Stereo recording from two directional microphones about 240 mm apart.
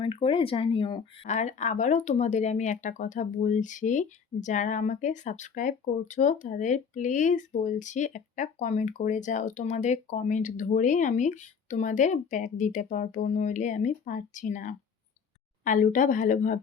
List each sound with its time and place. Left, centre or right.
0.0 s speech: left